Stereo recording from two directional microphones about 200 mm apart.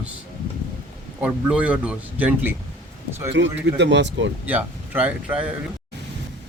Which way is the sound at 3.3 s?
60° right (ahead or behind).